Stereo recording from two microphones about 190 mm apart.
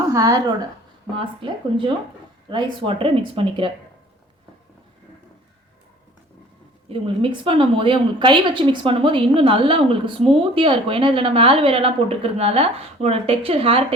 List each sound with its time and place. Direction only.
0.1 s a woman's voice: 15° right (ahead or behind)
6.8 s a woman's voice: 30° right (ahead or behind)